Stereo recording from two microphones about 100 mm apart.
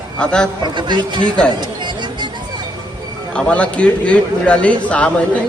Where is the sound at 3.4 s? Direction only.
10° left (ahead or behind).